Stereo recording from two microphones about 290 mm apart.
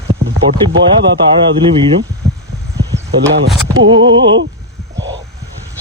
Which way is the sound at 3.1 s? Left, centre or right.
Right.